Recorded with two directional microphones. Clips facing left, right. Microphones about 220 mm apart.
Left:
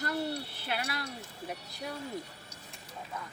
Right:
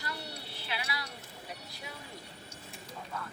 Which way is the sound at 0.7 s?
50° left (ahead or behind).